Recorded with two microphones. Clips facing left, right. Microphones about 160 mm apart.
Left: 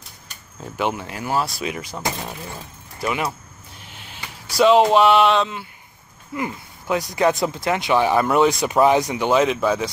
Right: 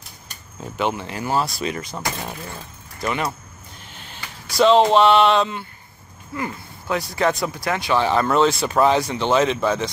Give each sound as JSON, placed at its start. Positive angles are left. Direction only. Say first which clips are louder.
{"t": 0.7, "sound": "speech", "louder": "even", "side_deg": 5}
{"t": 6.3, "sound": "speech", "louder": "left 1 dB", "side_deg": 20}